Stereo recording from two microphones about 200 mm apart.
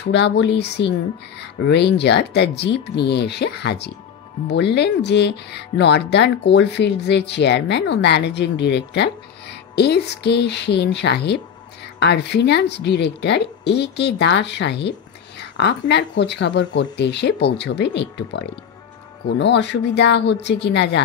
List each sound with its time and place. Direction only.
0.0 s speech: 60° left (ahead or behind)